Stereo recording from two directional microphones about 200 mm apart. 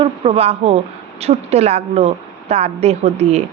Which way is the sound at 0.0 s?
30° right (ahead or behind).